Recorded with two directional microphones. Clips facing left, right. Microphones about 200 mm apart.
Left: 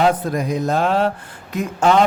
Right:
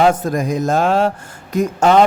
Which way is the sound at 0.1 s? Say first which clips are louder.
Right 2 dB; 45° right (ahead or behind).